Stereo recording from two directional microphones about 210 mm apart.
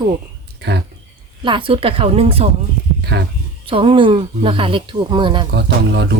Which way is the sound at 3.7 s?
25° right (ahead or behind).